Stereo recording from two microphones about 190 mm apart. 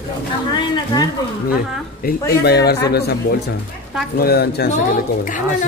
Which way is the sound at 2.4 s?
55° left (ahead or behind).